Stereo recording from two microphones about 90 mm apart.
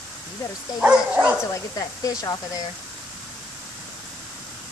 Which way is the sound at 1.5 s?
40° left (ahead or behind).